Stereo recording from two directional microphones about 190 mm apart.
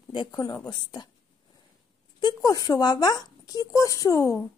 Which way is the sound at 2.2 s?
20° left (ahead or behind).